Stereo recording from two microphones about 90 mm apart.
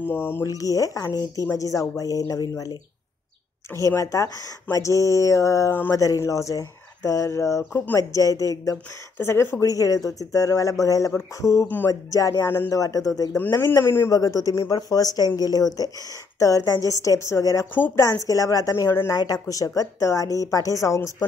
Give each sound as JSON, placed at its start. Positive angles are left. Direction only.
{"t": 0.0, "sound": "a man's voice", "side_deg": 25}
{"t": 0.5, "sound": "speech", "side_deg": 40}
{"t": 9.2, "sound": "speech", "side_deg": 30}
{"t": 11.6, "sound": "a man's voice", "side_deg": 20}
{"t": 11.9, "sound": "speech", "side_deg": 40}
{"t": 12.7, "sound": "speech", "side_deg": 40}
{"t": 13.4, "sound": "a man's voice", "side_deg": 25}
{"t": 14.1, "sound": "speech", "side_deg": 40}
{"t": 17.7, "sound": "a man's voice", "side_deg": 20}
{"t": 18.0, "sound": "speech", "side_deg": 35}
{"t": 18.9, "sound": "a man's voice", "side_deg": 25}
{"t": 19.1, "sound": "speech", "side_deg": 45}